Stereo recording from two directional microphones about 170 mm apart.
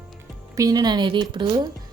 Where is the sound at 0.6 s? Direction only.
25° right (ahead or behind).